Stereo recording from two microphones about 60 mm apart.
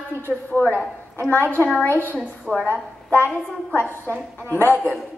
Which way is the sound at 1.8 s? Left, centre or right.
Left.